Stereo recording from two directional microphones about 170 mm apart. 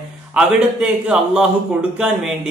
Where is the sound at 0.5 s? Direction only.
5° right (ahead or behind).